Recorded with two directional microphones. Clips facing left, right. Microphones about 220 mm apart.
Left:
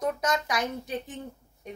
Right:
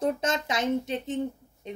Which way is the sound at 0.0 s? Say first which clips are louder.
Right 1 dB; 25° right (ahead or behind).